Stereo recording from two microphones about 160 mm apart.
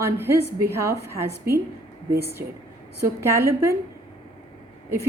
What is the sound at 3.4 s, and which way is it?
Speech, 15° right (ahead or behind).